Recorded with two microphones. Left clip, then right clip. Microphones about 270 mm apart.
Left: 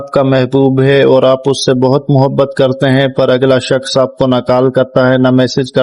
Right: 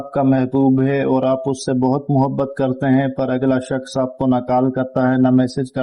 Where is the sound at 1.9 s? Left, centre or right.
Left.